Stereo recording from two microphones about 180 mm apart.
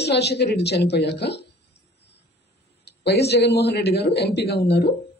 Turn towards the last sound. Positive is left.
turn(degrees=65)  # may be behind; listen again after turning